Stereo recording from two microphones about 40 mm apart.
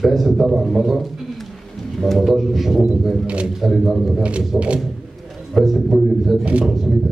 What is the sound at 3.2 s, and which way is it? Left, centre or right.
Speech, right.